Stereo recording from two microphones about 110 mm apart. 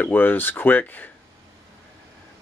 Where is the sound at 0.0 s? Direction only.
15° left (ahead or behind).